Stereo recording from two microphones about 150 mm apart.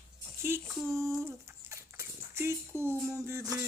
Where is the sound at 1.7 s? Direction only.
20° right (ahead or behind).